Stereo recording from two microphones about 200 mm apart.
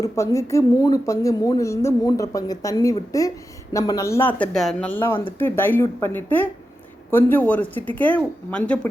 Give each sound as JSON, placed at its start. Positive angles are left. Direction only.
{"t": 0.0, "sound": "a woman's voice", "side_deg": 15}
{"t": 4.4, "sound": "a woman's voice", "side_deg": 5}